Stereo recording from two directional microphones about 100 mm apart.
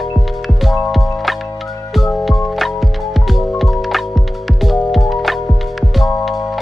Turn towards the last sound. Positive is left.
turn(degrees=0)  # may be behind; listen again after turning